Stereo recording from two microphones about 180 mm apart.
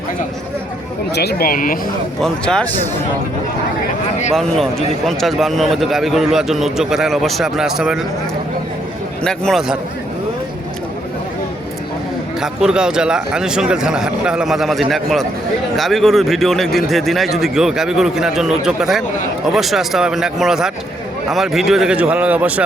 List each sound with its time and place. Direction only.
1.1 s speech: 65° left (ahead or behind)
2.2 s a man's voice: 5° left (ahead or behind)
4.4 s a man's voice: centre (ahead or behind)
9.2 s a man's voice: 5° left (ahead or behind)
12.4 s a man's voice: 5° right (ahead or behind)